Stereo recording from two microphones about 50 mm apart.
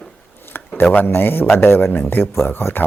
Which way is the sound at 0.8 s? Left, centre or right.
Left.